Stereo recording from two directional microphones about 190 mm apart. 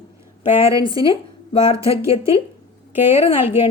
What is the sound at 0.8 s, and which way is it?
A woman's voice, 25° left (ahead or behind).